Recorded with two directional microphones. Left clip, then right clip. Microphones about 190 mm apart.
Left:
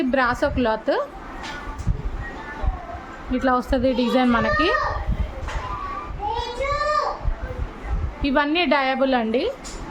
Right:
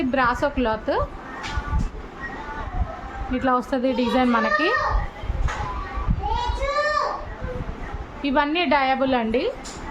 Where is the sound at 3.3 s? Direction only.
15° left (ahead or behind).